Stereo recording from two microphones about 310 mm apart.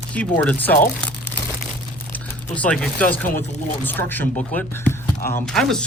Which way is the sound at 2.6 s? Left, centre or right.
Centre.